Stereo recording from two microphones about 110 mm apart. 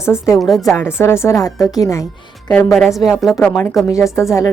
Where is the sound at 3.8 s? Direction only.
30° left (ahead or behind).